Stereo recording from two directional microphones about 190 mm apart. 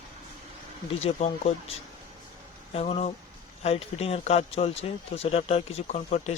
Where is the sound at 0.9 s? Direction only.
35° left (ahead or behind).